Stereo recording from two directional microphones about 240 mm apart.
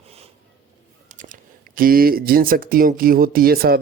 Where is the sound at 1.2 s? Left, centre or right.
Right.